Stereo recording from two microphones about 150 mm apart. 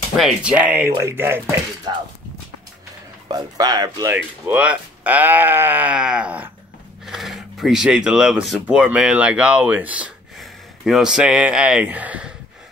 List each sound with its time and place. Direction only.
0.2 s speech: 5° right (ahead or behind)
3.3 s speech: 25° right (ahead or behind)
4.1 s speech: 10° right (ahead or behind)